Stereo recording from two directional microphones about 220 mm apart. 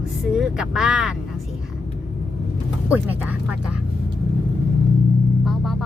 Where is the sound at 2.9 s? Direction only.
5° right (ahead or behind).